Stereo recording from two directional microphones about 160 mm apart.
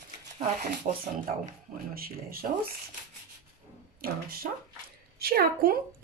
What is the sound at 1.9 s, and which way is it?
Speech, 70° right (ahead or behind).